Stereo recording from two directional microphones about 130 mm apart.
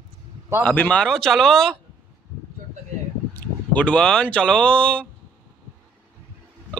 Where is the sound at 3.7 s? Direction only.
10° left (ahead or behind).